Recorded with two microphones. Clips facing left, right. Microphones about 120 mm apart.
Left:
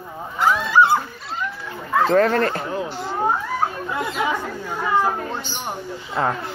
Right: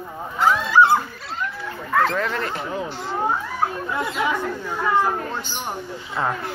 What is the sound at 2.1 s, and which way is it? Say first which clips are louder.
Speech: left 8 dB; 50° left (ahead or behind).